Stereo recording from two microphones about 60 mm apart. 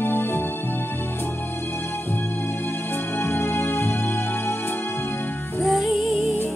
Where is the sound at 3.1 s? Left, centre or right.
Left.